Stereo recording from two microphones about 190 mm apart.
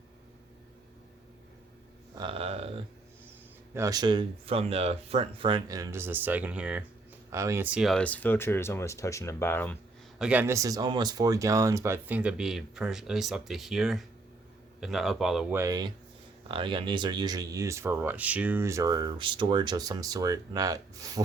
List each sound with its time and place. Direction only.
2.1 s speech: 30° right (ahead or behind)
3.8 s speech: 20° right (ahead or behind); by 9.7 s 10° left (ahead or behind)
10.2 s a man's voice: 5° right (ahead or behind)
15.5 s speech: 20° right (ahead or behind)